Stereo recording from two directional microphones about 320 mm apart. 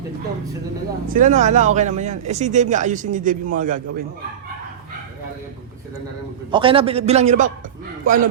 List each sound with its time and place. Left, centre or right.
1.0 s speech: right
6.5 s speech: centre